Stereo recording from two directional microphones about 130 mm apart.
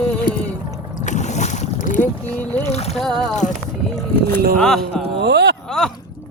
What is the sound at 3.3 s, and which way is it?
Music, 65° left (ahead or behind).